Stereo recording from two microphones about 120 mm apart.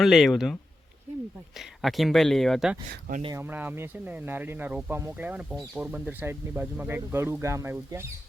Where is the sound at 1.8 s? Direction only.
Centre (ahead or behind).